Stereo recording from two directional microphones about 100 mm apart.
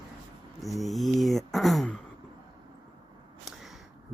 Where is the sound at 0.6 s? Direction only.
Centre (ahead or behind).